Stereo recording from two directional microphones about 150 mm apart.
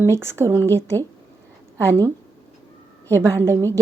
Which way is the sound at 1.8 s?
20° right (ahead or behind).